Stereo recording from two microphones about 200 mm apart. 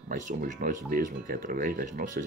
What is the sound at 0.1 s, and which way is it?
Speech, 40° right (ahead or behind).